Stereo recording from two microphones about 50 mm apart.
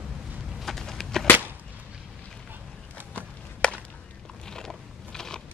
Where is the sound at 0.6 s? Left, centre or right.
Centre.